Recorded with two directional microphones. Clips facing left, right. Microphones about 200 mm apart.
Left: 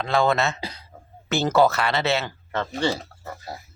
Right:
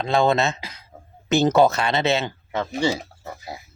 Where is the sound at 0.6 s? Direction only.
35° left (ahead or behind).